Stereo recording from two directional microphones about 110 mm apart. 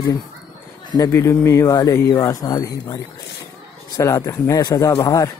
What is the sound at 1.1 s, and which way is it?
A man's voice, 25° left (ahead or behind).